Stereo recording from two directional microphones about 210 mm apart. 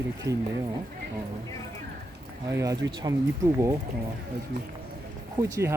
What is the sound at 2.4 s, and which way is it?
Speech, 15° right (ahead or behind).